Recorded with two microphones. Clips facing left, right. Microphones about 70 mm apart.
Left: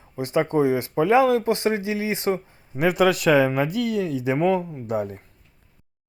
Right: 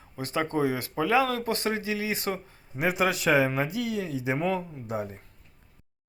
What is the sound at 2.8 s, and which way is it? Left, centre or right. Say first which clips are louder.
Speech: left 6 dB; left.